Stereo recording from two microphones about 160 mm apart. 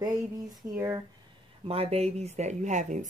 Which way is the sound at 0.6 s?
20° right (ahead or behind).